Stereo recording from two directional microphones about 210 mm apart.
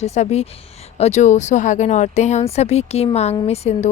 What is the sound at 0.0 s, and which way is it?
A woman's voice, 30° left (ahead or behind).